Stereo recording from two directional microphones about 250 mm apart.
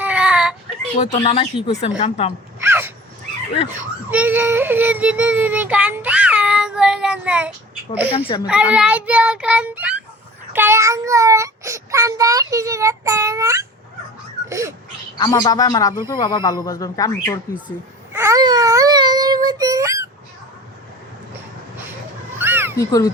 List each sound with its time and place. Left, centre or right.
0.0 s a sound: centre
0.9 s speech: left
2.6 s wail: centre
4.1 s a sound: centre
7.9 s child singing: centre
15.2 s a man's voice: centre
18.1 s baby cry: centre
22.4 s children playing: centre
22.8 s a man's voice: centre